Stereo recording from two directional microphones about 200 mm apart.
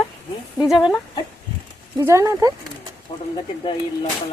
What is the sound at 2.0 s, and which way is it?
Speech, 15° right (ahead or behind).